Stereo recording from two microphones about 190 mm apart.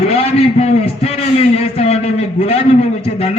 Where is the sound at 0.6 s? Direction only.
30° left (ahead or behind).